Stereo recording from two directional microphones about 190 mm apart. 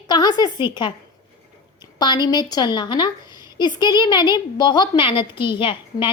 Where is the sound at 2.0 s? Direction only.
20° left (ahead or behind).